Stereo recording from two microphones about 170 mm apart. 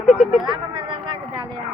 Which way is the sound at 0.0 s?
5° right (ahead or behind).